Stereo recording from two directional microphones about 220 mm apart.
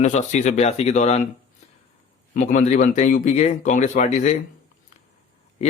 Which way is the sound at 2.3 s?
35° left (ahead or behind).